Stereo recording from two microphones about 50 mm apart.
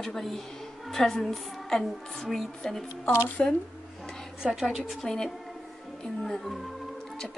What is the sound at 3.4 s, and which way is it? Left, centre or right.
Speech, left.